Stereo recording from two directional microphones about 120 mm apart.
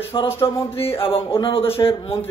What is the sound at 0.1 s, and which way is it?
Speech, 50° left (ahead or behind).